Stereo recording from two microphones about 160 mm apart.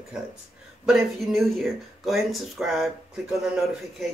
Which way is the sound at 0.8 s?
Centre (ahead or behind).